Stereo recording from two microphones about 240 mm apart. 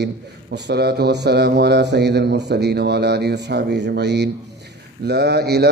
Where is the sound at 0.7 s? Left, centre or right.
Right.